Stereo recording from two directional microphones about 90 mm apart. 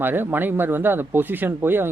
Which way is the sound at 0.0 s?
25° right (ahead or behind).